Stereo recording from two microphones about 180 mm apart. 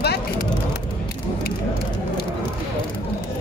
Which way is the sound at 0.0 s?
60° left (ahead or behind).